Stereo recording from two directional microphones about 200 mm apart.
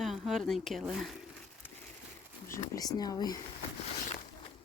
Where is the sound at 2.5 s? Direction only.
20° left (ahead or behind).